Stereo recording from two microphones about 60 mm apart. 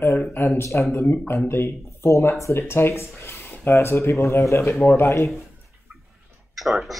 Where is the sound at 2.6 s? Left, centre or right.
Left.